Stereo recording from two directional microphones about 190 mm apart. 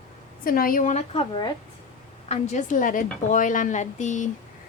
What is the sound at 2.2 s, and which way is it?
A woman's voice, 35° left (ahead or behind).